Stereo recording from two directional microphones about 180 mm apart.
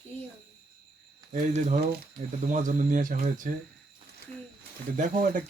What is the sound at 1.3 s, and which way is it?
Speech, 40° right (ahead or behind).